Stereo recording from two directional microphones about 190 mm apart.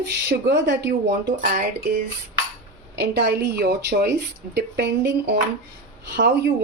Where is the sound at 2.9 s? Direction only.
65° right (ahead or behind).